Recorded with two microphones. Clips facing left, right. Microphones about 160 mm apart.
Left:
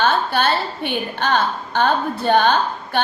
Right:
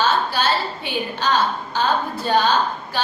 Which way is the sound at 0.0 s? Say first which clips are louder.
Left 2 dB; 55° left (ahead or behind).